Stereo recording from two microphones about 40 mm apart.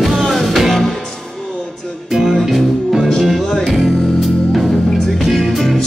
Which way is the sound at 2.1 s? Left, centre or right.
Centre.